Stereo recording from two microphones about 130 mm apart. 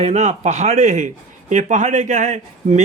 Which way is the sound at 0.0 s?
60° right (ahead or behind).